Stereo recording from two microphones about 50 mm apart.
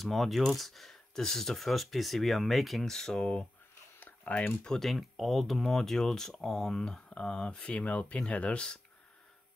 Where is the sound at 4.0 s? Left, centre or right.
Left.